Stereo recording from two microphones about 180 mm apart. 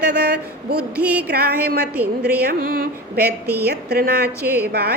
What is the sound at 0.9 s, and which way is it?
Speech, 10° right (ahead or behind).